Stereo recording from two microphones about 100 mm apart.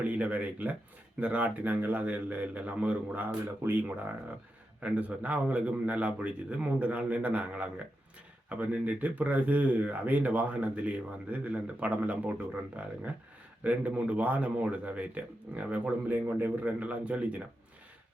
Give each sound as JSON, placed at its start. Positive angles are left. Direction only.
{"t": 0.0, "sound": "speech", "side_deg": -15}